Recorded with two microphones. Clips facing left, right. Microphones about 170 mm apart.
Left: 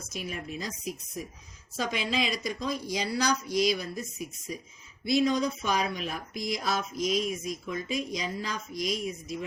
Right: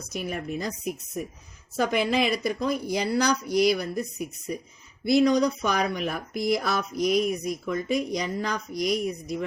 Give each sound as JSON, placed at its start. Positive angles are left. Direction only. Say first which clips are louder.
{"t": 0.1, "sound": "speech", "louder": "right 6 dB", "side_deg": -60}